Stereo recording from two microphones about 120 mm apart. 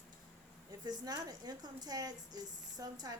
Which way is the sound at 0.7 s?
35° right (ahead or behind).